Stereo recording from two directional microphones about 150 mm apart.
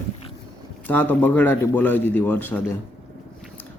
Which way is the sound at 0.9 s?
10° left (ahead or behind).